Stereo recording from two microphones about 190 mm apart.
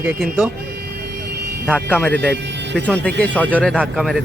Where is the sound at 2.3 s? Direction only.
65° right (ahead or behind).